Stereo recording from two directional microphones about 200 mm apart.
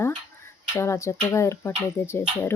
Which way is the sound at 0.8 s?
15° left (ahead or behind).